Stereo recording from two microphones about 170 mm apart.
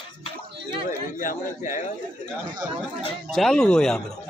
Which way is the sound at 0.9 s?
50° left (ahead or behind).